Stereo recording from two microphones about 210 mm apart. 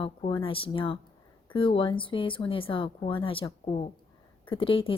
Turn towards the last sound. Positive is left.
turn(degrees=25)  # may be behind; listen again after turning